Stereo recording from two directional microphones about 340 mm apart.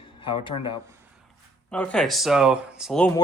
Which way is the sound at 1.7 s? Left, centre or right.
Centre.